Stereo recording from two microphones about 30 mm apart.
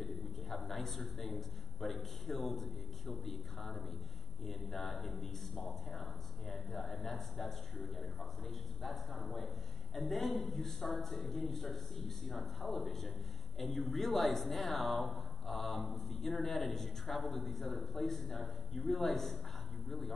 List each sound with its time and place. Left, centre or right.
0.0 s a man's voice: centre